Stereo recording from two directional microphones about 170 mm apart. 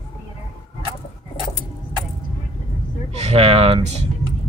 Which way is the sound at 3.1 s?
40° right (ahead or behind).